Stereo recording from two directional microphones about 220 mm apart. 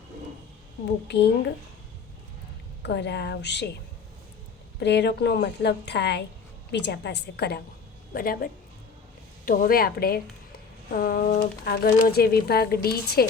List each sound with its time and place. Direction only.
1.0 s a woman's voice: 50° left (ahead or behind)
2.8 s a woman's voice: 50° left (ahead or behind)
4.8 s a woman's voice: 50° left (ahead or behind)
9.5 s a woman's voice: 40° left (ahead or behind)